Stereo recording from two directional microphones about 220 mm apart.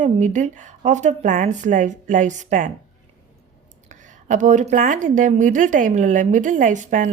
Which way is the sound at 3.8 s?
35° right (ahead or behind).